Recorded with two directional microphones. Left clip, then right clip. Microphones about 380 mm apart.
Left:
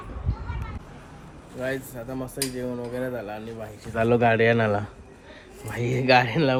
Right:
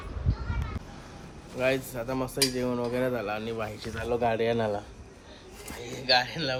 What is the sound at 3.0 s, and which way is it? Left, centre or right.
Speech, centre.